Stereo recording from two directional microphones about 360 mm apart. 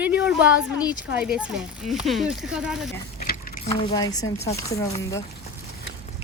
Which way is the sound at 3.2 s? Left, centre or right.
Centre.